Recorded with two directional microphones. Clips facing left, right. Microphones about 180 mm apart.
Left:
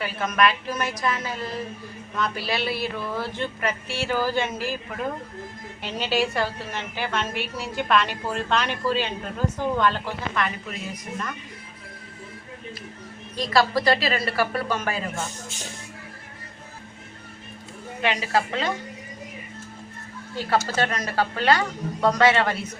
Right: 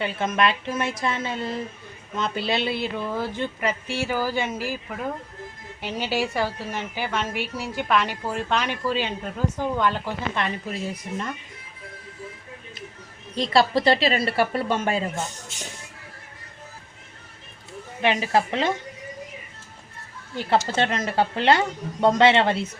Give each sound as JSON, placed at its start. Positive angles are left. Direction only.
{"t": 0.0, "sound": "a woman's voice", "side_deg": -25}
{"t": 5.8, "sound": "a woman's voice", "side_deg": -10}
{"t": 10.3, "sound": "a woman's voice", "side_deg": -30}
{"t": 13.3, "sound": "a woman's voice", "side_deg": -25}
{"t": 18.0, "sound": "a woman's voice", "side_deg": -20}
{"t": 20.3, "sound": "a woman's voice", "side_deg": -20}